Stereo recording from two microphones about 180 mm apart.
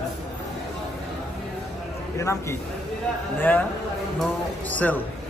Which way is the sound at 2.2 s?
15° left (ahead or behind).